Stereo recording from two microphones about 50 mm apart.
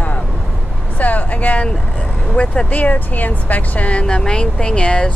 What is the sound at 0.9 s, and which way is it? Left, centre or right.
Speech, left.